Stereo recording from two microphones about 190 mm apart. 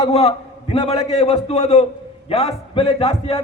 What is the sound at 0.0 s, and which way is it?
A man's voice, 30° left (ahead or behind).